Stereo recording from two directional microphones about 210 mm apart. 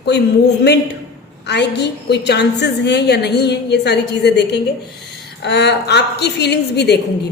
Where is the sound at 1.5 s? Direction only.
55° left (ahead or behind).